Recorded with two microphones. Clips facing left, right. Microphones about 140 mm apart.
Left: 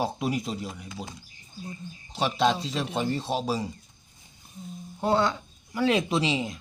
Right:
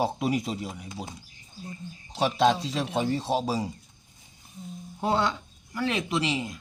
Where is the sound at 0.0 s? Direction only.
Centre (ahead or behind).